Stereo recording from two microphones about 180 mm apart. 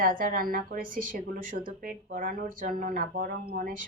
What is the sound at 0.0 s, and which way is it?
A woman's voice, 50° right (ahead or behind).